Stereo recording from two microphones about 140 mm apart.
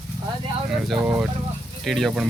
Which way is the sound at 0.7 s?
Centre (ahead or behind).